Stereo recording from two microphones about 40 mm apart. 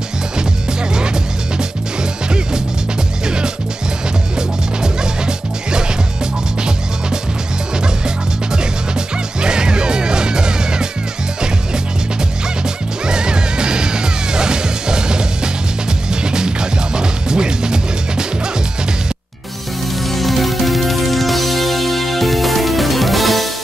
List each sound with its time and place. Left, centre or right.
0.9 s music: centre
9.4 s music: right
12.6 s music: centre
20.1 s music: centre